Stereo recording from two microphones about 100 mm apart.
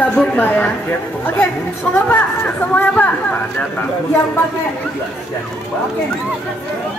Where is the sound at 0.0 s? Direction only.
15° left (ahead or behind).